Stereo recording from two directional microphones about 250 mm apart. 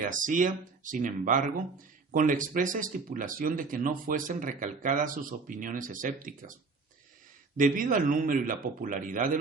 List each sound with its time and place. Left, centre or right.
0.0 s speech: right
7.5 s speech: right